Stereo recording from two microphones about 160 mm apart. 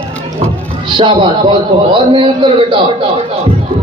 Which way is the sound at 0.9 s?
30° right (ahead or behind).